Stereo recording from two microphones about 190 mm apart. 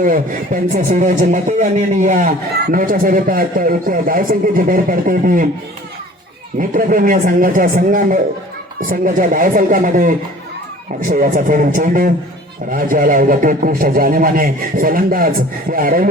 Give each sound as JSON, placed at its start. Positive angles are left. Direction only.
{"t": 0.0, "sound": "a man's voice", "side_deg": -45}
{"t": 6.6, "sound": "a man's voice", "side_deg": -45}